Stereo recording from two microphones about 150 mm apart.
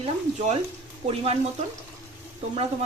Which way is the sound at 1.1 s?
40° right (ahead or behind).